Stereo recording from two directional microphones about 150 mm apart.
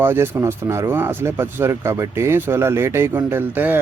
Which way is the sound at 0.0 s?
15° right (ahead or behind).